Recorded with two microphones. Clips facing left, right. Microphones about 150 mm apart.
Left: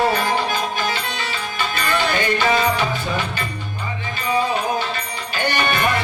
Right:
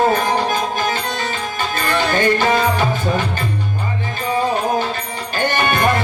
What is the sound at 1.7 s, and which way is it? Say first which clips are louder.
Music: right 3 dB; 45° right (ahead or behind).